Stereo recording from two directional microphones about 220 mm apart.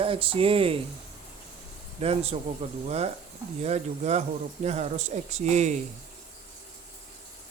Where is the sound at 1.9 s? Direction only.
25° right (ahead or behind).